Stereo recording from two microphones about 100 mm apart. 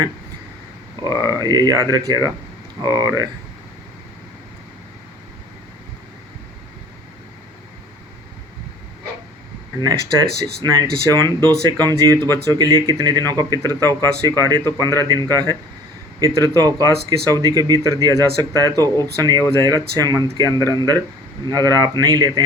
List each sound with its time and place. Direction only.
1.2 s speech: 40° right (ahead or behind)
9.8 s speech: 40° right (ahead or behind)